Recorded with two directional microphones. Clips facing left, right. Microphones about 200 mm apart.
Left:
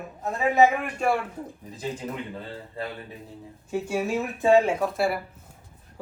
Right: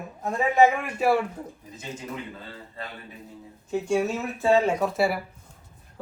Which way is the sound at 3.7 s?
5° left (ahead or behind).